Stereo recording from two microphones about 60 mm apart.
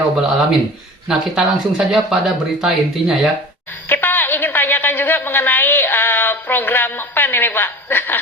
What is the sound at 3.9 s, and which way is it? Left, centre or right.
A woman's voice, left.